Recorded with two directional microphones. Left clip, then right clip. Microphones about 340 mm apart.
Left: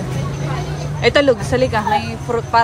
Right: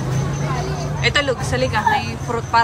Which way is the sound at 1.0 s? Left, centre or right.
Centre.